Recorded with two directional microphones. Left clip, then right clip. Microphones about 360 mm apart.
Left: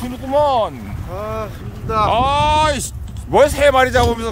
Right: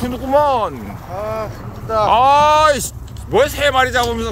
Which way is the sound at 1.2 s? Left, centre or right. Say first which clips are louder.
Right 2 dB; centre.